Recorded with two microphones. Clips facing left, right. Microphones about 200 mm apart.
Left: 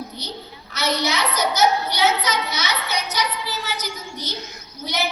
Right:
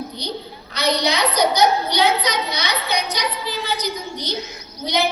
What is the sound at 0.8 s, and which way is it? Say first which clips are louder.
A woman's voice: right 3 dB; 15° right (ahead or behind).